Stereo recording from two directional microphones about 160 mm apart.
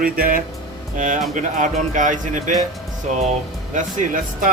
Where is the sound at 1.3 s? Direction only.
50° right (ahead or behind).